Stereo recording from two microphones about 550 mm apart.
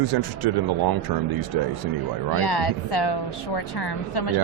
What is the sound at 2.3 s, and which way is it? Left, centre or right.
Speech, left.